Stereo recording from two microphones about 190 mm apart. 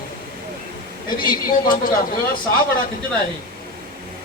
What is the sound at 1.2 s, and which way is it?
Speech, 50° left (ahead or behind).